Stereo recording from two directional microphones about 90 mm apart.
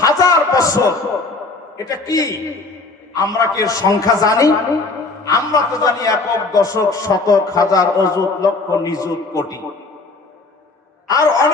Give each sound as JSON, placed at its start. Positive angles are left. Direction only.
{"t": 0.0, "sound": "a sound", "side_deg": 40}
{"t": 1.8, "sound": "a man's voice", "side_deg": 40}
{"t": 11.1, "sound": "a man's voice", "side_deg": 40}